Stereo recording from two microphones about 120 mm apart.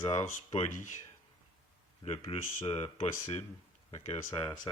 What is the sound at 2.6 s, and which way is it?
Mantra, 65° left (ahead or behind).